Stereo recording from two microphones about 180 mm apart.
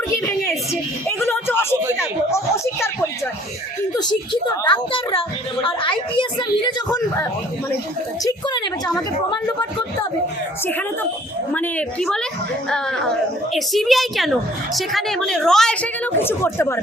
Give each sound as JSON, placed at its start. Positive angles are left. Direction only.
{"t": 0.4, "sound": "a woman's voice", "side_deg": 15}
{"t": 3.9, "sound": "speech", "side_deg": 25}
{"t": 8.2, "sound": "a sound", "side_deg": 20}
{"t": 11.5, "sound": "a woman's voice", "side_deg": 10}